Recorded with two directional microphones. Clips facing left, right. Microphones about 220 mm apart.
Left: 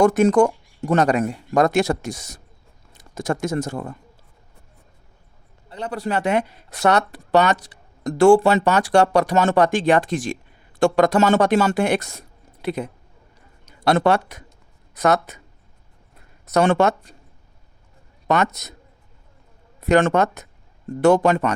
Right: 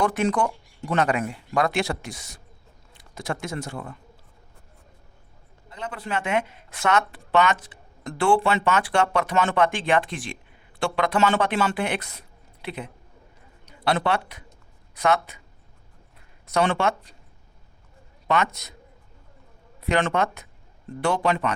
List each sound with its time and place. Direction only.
0.0 s speech: 45° left (ahead or behind)
5.6 s speech: 35° left (ahead or behind)
16.5 s speech: 45° left (ahead or behind)
18.3 s speech: 45° left (ahead or behind)
19.8 s speech: 45° left (ahead or behind)